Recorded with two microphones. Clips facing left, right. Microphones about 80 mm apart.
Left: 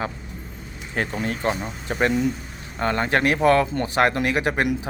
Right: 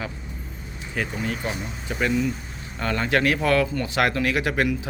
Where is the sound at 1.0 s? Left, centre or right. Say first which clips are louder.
Left 2 dB; left.